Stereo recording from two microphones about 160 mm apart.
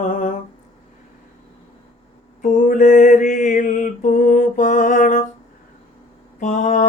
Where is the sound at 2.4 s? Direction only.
55° left (ahead or behind).